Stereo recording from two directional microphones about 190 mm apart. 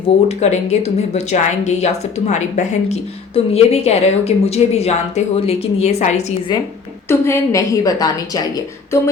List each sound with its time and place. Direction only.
0.0 s speech: 35° left (ahead or behind)
7.1 s a woman's voice: 15° left (ahead or behind)